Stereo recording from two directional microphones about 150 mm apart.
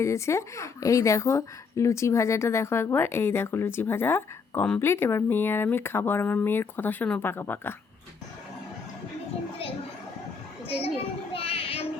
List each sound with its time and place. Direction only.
0.0 s a woman's voice: 20° left (ahead or behind)
10.7 s a child's voice: 40° left (ahead or behind)
11.3 s a sound: 40° left (ahead or behind)